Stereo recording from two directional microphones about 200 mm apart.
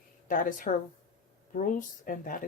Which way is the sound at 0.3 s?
40° left (ahead or behind).